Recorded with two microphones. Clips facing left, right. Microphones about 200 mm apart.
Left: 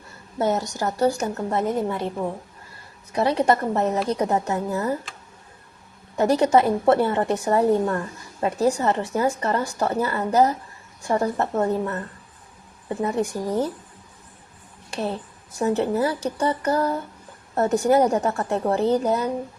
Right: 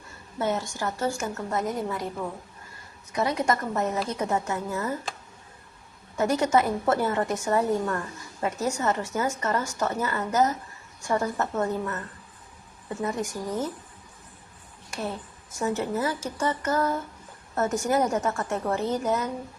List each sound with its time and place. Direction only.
0.3 s a woman's voice: 40° left (ahead or behind)
6.1 s a woman's voice: 35° left (ahead or behind)
14.8 s a woman's voice: 30° left (ahead or behind)